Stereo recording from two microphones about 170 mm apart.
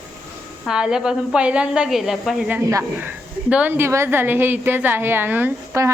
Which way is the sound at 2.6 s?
15° right (ahead or behind).